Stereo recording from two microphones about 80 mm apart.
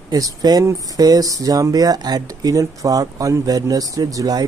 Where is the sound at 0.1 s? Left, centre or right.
Right.